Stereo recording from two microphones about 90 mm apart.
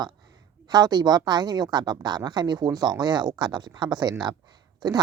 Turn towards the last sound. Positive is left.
turn(degrees=-45)  # may be behind; listen again after turning